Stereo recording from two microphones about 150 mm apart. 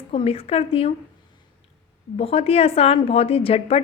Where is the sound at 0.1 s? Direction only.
40° left (ahead or behind).